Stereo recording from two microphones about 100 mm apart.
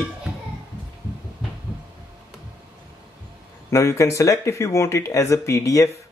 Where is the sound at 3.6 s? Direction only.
30° left (ahead or behind).